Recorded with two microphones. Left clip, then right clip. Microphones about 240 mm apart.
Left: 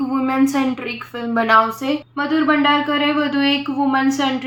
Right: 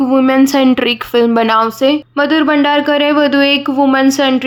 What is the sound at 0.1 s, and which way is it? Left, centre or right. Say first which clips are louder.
Speech: right 8 dB; right.